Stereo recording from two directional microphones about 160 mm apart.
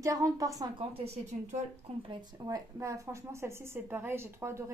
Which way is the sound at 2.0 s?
25° right (ahead or behind).